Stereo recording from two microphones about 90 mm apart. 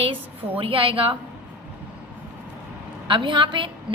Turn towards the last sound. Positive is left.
turn(degrees=-65)  # may be behind; listen again after turning